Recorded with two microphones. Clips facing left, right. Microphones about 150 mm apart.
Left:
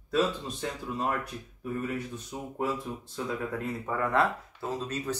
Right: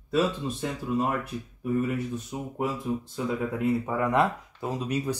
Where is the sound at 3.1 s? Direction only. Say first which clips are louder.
Even; 10° right (ahead or behind).